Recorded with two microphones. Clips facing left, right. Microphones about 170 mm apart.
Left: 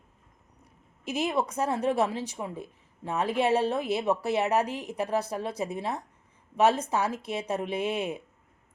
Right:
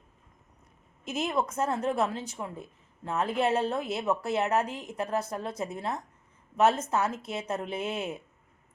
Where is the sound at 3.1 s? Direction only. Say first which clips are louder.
Left 2 dB; 15° left (ahead or behind).